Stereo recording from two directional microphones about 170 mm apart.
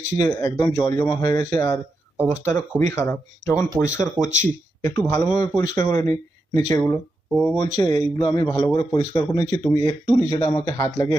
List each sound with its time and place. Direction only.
0.3 s a man's voice: 15° left (ahead or behind)
2.9 s speech: 15° left (ahead or behind)
4.2 s speech: 45° right (ahead or behind)
4.8 s a man's voice: 15° left (ahead or behind)
7.5 s a man's voice: 20° left (ahead or behind)